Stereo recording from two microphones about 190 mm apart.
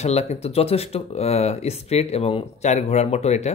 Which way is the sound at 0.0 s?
35° left (ahead or behind).